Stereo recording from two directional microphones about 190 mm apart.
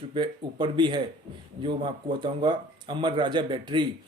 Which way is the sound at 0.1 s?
25° right (ahead or behind).